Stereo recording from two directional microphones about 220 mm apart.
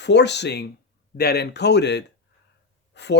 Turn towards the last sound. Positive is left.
turn(degrees=50)  # may be behind; listen again after turning